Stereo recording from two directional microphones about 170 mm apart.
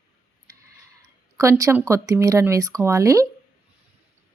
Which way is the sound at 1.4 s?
20° right (ahead or behind).